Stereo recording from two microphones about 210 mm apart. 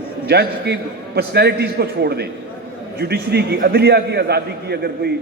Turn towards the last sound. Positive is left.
turn(degrees=-50)  # may be behind; listen again after turning